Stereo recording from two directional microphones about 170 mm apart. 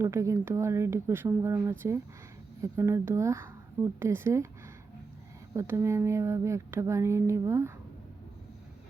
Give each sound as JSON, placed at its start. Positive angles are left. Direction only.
{"t": 0.0, "sound": "speech", "side_deg": -15}
{"t": 5.5, "sound": "speech", "side_deg": -15}